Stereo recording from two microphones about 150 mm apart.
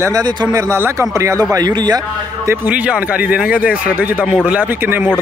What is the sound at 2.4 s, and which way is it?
Speech, 10° right (ahead or behind).